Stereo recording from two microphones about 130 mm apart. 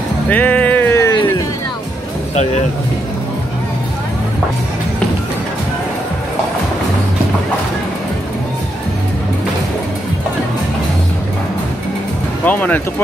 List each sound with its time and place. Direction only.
0.3 s music: 10° left (ahead or behind)
1.1 s music: 35° left (ahead or behind)
12.4 s speech: 15° left (ahead or behind)